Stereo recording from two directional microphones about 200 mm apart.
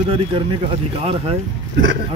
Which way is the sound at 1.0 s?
30° right (ahead or behind).